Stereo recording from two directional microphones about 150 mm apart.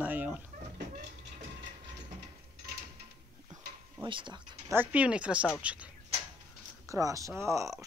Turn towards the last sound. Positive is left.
turn(degrees=-20)  # may be behind; listen again after turning